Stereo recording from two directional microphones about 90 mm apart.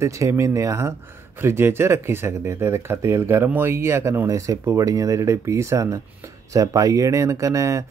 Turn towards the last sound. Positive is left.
turn(degrees=-35)  # may be behind; listen again after turning